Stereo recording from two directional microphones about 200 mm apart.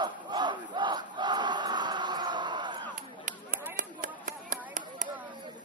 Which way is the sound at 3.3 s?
40° right (ahead or behind).